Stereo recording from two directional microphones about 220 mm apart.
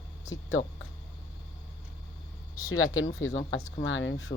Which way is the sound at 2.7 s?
70° left (ahead or behind).